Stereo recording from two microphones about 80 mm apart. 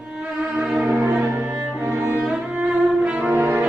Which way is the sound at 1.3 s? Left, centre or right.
Right.